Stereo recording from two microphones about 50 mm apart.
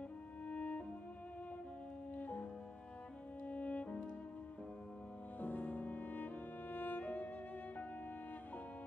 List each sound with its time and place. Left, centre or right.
0.5 s music: left
2.1 s music: left
3.4 s french horn: left
5.4 s music: left